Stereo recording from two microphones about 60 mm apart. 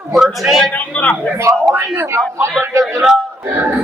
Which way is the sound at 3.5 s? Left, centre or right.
Right.